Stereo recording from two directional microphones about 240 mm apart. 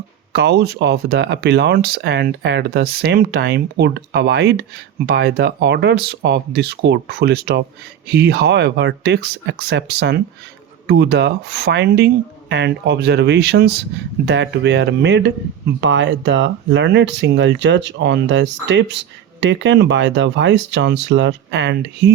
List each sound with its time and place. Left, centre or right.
0.3 s speech: right